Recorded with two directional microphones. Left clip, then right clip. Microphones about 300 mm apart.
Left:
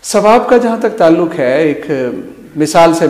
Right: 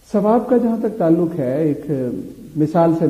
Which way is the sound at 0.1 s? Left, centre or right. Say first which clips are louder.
Left 8 dB; centre.